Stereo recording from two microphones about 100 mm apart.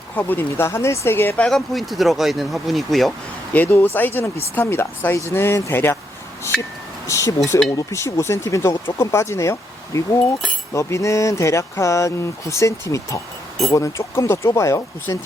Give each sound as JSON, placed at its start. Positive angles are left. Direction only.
{"t": 0.2, "sound": "speech", "side_deg": 20}
{"t": 1.5, "sound": "speech", "side_deg": 0}
{"t": 3.5, "sound": "speech", "side_deg": 15}
{"t": 7.1, "sound": "speech", "side_deg": 30}